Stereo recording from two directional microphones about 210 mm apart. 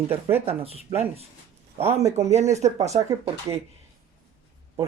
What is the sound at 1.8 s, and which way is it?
Speech, 30° right (ahead or behind).